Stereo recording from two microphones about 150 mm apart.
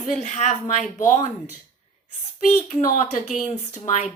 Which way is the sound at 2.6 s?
50° left (ahead or behind).